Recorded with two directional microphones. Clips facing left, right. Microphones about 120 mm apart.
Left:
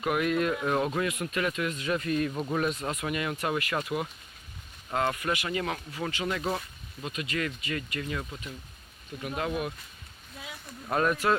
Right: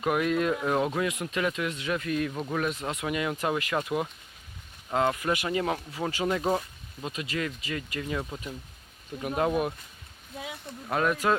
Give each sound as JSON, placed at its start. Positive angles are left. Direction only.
{"t": 0.0, "sound": "speech", "side_deg": 5}
{"t": 0.3, "sound": "speech", "side_deg": -20}
{"t": 0.6, "sound": "speech", "side_deg": -5}
{"t": 1.2, "sound": "speech", "side_deg": -20}
{"t": 1.9, "sound": "speech", "side_deg": 0}
{"t": 2.7, "sound": "speech", "side_deg": -15}
{"t": 6.1, "sound": "speech", "side_deg": -40}
{"t": 6.3, "sound": "speech", "side_deg": -25}
{"t": 9.2, "sound": "speech", "side_deg": -35}
{"t": 10.8, "sound": "speech", "side_deg": -5}
{"t": 11.1, "sound": "speech", "side_deg": -15}